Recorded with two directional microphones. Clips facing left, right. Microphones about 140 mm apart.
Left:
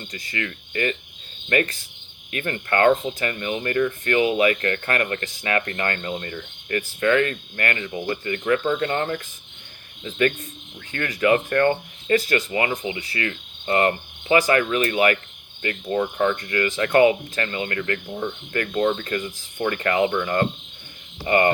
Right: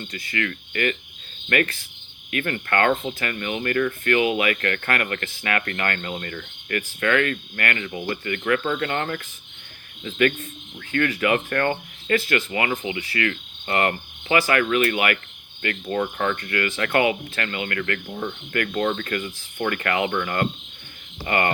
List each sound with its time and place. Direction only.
0.1 s cricket: 35° left (ahead or behind)
1.5 s speech: 30° left (ahead or behind)
2.5 s cricket: 25° left (ahead or behind)
10.0 s speech: 30° left (ahead or behind)
12.5 s cricket: 30° left (ahead or behind)
15.6 s cricket: 20° left (ahead or behind)